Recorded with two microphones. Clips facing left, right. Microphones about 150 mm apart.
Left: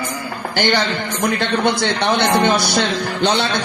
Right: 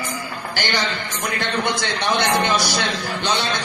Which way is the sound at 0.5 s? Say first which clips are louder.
Left 6 dB; 60° left (ahead or behind).